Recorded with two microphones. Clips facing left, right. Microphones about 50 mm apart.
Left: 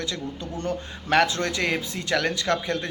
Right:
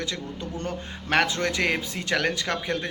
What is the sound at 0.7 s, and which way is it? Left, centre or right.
Speech, right.